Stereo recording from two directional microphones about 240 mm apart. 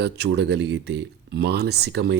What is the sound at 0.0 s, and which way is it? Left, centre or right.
Speech, right.